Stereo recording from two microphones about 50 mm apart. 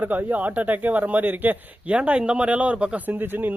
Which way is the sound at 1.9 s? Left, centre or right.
Right.